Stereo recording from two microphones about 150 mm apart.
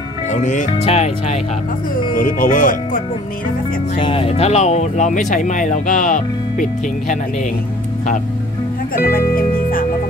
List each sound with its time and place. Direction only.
0.3 s speech: 55° left (ahead or behind)
0.7 s speech: 45° left (ahead or behind)
2.1 s speech: 65° left (ahead or behind)
3.9 s speech: 35° left (ahead or behind); by 7.2 s 60° left (ahead or behind)
8.9 s speech: 70° left (ahead or behind)